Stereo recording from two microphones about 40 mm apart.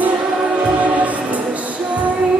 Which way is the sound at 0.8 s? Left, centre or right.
Right.